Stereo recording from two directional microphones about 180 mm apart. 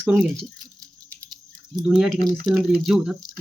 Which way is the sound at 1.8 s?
5° right (ahead or behind).